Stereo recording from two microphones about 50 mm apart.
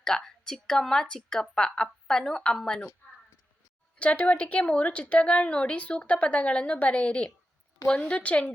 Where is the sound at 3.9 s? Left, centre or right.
Left.